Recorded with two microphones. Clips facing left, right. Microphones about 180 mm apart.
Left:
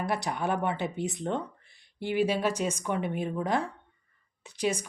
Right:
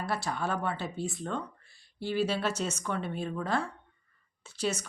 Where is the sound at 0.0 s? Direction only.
15° left (ahead or behind).